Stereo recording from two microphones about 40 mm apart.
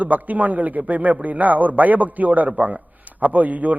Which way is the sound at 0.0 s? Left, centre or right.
Right.